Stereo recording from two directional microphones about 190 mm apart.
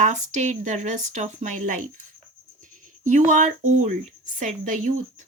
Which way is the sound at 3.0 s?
40° right (ahead or behind).